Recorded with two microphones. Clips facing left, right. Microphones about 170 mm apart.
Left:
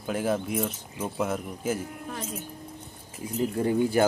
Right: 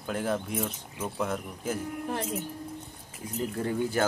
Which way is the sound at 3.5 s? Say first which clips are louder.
Left 5 dB; 15° left (ahead or behind).